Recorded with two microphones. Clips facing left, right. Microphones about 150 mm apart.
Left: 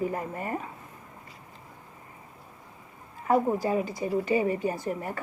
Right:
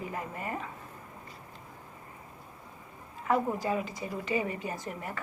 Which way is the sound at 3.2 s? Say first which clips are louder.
Left 4 dB; 35° left (ahead or behind).